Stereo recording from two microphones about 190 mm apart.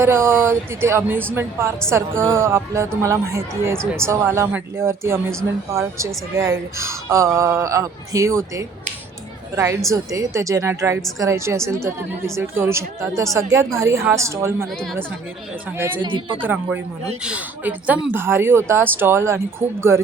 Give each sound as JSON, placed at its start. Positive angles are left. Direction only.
{"t": 0.0, "sound": "speech", "side_deg": -15}
{"t": 6.3, "sound": "speech", "side_deg": -15}
{"t": 9.9, "sound": "speech", "side_deg": -15}
{"t": 16.0, "sound": "speech", "side_deg": -25}
{"t": 16.5, "sound": "speech", "side_deg": -10}